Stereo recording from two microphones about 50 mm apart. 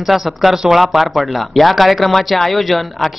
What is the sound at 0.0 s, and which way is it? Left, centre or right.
Speech, centre.